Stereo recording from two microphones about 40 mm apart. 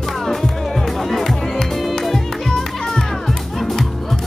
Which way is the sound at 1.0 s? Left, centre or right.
Centre.